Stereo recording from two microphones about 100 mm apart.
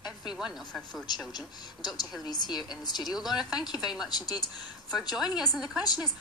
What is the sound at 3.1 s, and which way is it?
Speech, 5° right (ahead or behind).